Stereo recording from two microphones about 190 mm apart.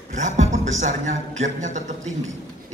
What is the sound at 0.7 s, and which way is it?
Speech, 40° right (ahead or behind).